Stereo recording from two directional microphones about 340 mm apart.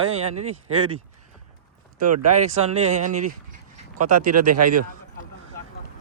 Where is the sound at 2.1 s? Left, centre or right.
Right.